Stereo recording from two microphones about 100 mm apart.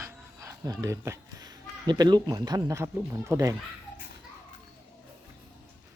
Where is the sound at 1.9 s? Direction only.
45° right (ahead or behind); by 3.5 s 30° right (ahead or behind).